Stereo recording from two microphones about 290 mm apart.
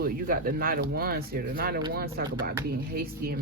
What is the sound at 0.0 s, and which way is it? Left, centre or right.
Speech, right.